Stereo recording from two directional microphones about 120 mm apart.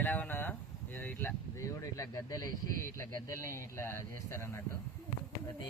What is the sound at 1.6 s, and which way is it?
Speech, 25° left (ahead or behind).